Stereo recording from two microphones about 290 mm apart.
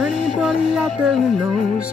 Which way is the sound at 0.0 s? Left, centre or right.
Centre.